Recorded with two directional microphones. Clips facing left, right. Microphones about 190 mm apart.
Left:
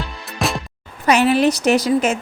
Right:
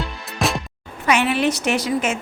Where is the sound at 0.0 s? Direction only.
Centre (ahead or behind).